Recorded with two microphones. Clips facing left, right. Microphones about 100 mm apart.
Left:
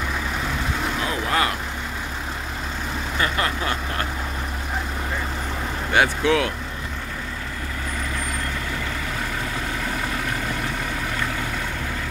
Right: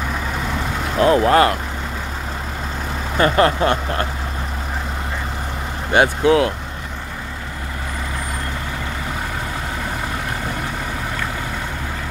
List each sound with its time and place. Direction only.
0.9 s speech: 50° right (ahead or behind)
3.2 s speech: 45° right (ahead or behind)
5.9 s speech: 35° right (ahead or behind)